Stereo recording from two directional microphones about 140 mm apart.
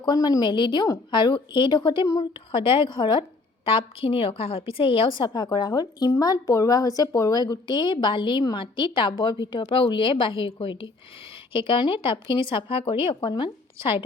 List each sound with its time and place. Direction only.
0.0 s a woman's voice: 30° left (ahead or behind)